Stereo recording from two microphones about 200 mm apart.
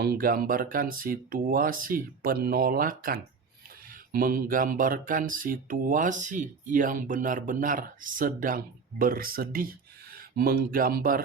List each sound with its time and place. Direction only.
0.0 s speech: 50° right (ahead or behind)